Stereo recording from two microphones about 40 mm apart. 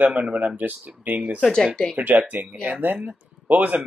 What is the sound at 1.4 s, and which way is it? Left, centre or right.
Speech, centre.